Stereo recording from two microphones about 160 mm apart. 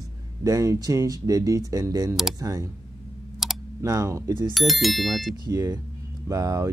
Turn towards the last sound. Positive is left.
turn(degrees=-20)  # may be behind; listen again after turning